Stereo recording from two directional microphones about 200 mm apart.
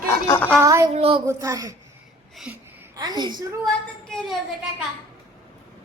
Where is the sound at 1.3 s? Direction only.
15° right (ahead or behind).